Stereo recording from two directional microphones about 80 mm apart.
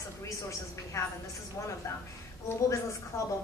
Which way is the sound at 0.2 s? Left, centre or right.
Left.